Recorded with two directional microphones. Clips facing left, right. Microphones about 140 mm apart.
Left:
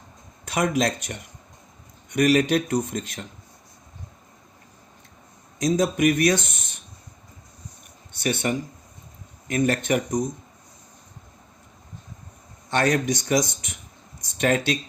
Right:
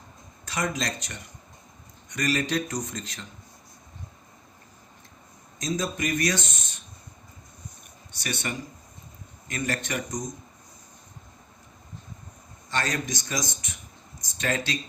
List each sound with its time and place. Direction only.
0.4 s speech: 60° left (ahead or behind)
5.5 s speech: 60° left (ahead or behind)
8.1 s speech: 55° left (ahead or behind)
12.7 s speech: 60° left (ahead or behind)
14.2 s a sound: 60° left (ahead or behind)